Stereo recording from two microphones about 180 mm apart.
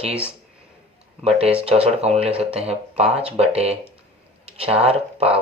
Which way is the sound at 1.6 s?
35° right (ahead or behind).